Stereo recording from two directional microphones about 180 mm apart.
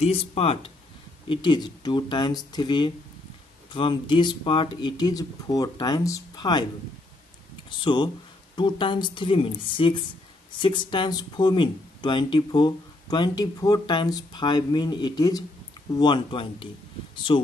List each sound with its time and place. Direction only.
0.0 s speech: 35° left (ahead or behind)
7.8 s speech: 25° left (ahead or behind)